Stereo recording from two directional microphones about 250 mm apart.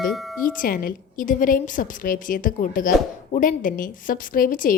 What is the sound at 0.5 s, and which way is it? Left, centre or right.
A woman's voice, left.